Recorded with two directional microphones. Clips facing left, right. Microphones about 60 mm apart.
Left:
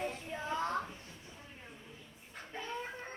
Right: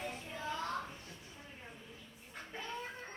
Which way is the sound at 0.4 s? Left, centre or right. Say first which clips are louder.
Left 4 dB; left.